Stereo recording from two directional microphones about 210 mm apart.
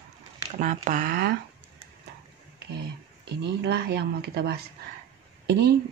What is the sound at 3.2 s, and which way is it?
Speech, 50° right (ahead or behind).